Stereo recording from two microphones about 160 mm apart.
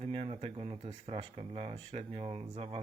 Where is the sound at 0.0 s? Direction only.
40° right (ahead or behind).